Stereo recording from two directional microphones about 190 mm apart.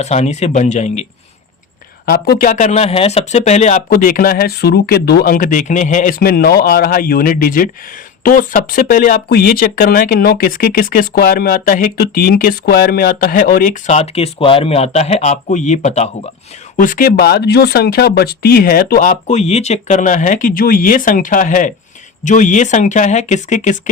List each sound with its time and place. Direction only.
0.0 s speech: 35° left (ahead or behind)
2.0 s speech: 55° left (ahead or behind); by 23.9 s 40° left (ahead or behind)